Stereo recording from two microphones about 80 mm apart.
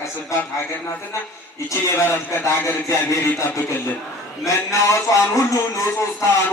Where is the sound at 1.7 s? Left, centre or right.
Left.